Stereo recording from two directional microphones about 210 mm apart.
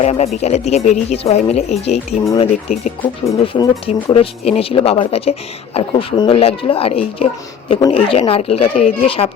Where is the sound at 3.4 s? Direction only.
25° left (ahead or behind).